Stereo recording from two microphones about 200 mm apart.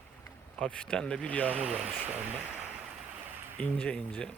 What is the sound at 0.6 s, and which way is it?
Speech, 5° left (ahead or behind).